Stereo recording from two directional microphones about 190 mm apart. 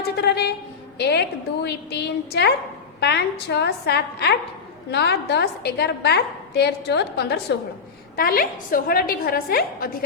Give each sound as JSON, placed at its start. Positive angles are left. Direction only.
{"t": 0.0, "sound": "a woman's voice", "side_deg": 60}